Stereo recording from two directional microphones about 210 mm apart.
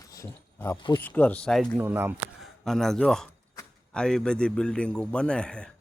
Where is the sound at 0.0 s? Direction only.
15° left (ahead or behind).